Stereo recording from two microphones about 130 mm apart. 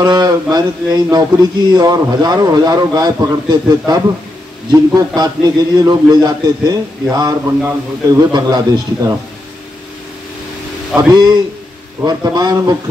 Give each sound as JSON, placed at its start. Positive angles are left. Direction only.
{"t": 0.0, "sound": "a man's voice", "side_deg": -30}
{"t": 11.0, "sound": "a man's voice", "side_deg": -30}